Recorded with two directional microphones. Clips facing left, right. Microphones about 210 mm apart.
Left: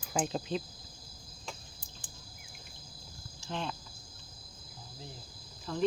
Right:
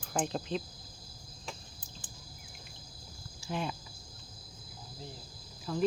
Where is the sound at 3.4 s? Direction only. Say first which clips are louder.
Right 2 dB; 10° right (ahead or behind).